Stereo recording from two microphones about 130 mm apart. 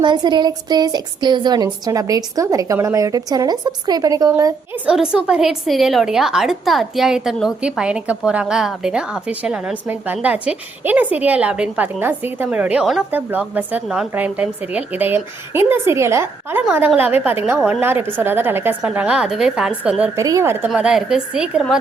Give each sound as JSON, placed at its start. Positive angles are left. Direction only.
{"t": 0.0, "sound": "a woman's voice", "side_deg": -35}
{"t": 4.9, "sound": "a woman's voice", "side_deg": -5}
{"t": 20.1, "sound": "a woman's voice", "side_deg": -25}
{"t": 20.7, "sound": "a woman's voice", "side_deg": -5}